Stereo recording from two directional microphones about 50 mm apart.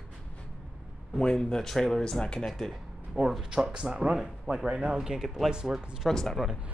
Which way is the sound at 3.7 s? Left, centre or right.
Centre.